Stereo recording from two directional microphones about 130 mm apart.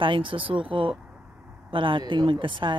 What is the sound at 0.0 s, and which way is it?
Speech, 40° right (ahead or behind).